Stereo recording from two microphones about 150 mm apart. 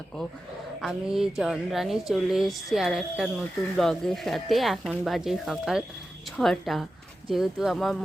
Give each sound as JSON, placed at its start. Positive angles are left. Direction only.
{"t": 0.8, "sound": "speech", "side_deg": 0}